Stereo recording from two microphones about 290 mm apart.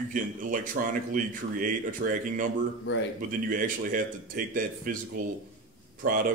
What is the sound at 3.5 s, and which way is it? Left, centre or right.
Speech, right.